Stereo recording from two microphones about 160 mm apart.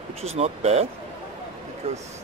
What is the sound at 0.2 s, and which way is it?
Speech, 40° right (ahead or behind).